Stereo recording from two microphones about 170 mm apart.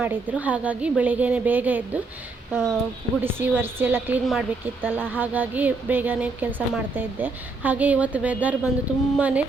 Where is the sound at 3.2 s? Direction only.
10° right (ahead or behind).